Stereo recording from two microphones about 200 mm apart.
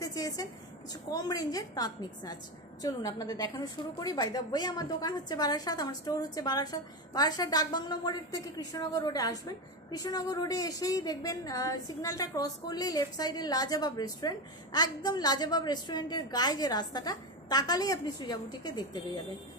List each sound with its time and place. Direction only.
0.0 s a woman's voice: 20° left (ahead or behind)